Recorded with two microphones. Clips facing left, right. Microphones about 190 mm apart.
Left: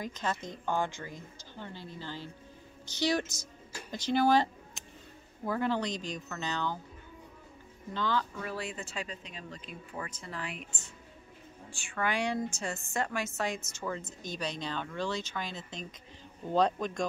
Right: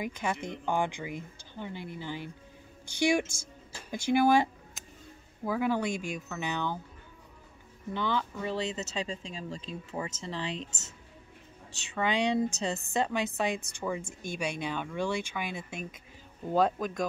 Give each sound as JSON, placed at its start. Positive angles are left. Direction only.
{"t": 0.0, "sound": "speech", "side_deg": -10}
{"t": 4.8, "sound": "a sound", "side_deg": 0}
{"t": 5.4, "sound": "speech", "side_deg": -10}
{"t": 7.9, "sound": "speech", "side_deg": -15}
{"t": 11.8, "sound": "a man's voice", "side_deg": -20}